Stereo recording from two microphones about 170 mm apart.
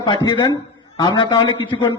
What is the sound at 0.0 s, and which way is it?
A man's voice, 25° left (ahead or behind).